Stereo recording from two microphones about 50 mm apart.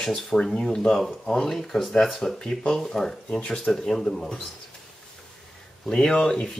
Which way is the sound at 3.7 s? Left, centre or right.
Centre.